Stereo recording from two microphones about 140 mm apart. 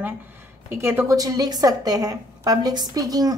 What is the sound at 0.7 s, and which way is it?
A woman's voice, 15° right (ahead or behind).